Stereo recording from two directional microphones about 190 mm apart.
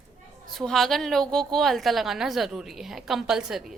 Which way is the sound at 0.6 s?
Centre (ahead or behind).